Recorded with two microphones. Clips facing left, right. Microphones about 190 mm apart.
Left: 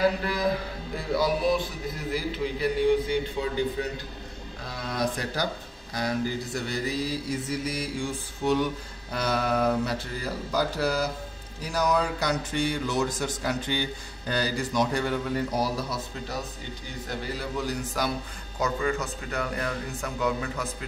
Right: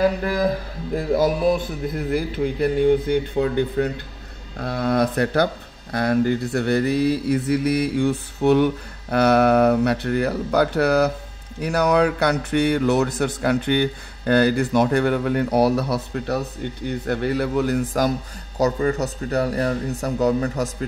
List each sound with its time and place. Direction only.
0.9 s speech: 45° right (ahead or behind)
18.6 s speech: 40° right (ahead or behind)